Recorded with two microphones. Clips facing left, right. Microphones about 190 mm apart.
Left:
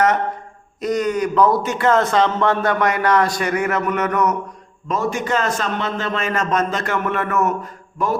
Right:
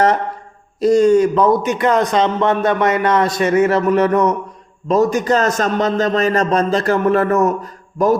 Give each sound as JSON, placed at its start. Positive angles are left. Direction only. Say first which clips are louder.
{"t": 0.8, "sound": "a man's voice", "louder": "right 9 dB", "side_deg": -30}